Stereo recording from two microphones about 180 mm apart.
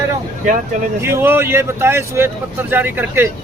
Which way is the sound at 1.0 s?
15° right (ahead or behind).